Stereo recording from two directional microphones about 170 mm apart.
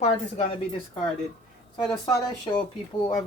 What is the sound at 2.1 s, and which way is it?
Speech, 25° left (ahead or behind).